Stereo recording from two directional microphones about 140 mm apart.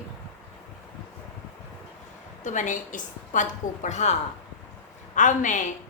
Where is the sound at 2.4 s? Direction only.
60° left (ahead or behind).